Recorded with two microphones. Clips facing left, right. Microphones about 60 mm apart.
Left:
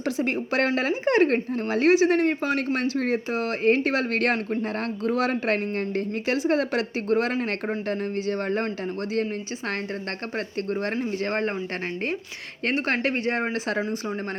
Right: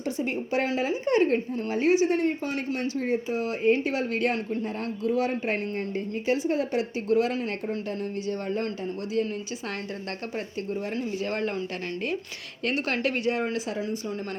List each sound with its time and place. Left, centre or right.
0.0 s speech: left
7.1 s a man's voice: left
10.3 s a man's voice: left
10.9 s speech: left
12.6 s speech: left